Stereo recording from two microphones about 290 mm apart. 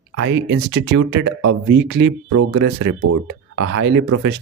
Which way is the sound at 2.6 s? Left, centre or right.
Right.